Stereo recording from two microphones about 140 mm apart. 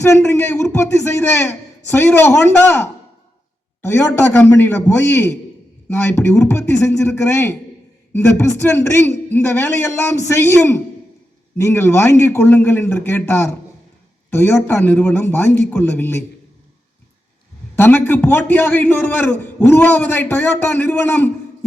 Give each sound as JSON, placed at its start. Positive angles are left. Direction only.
{"t": 0.0, "sound": "a man's voice", "side_deg": 15}
{"t": 17.7, "sound": "a man's voice", "side_deg": 15}